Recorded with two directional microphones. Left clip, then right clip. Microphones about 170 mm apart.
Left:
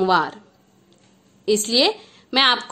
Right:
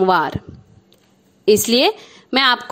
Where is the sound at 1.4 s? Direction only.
40° right (ahead or behind).